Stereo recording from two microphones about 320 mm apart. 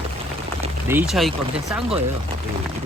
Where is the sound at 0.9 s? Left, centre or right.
Centre.